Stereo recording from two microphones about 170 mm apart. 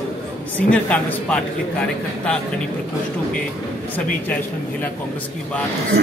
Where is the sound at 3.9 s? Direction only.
10° left (ahead or behind).